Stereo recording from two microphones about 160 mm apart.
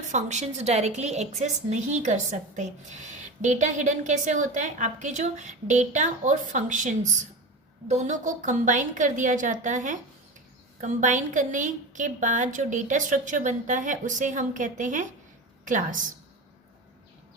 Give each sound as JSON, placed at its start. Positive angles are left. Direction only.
{"t": 0.1, "sound": "a woman's voice", "side_deg": -45}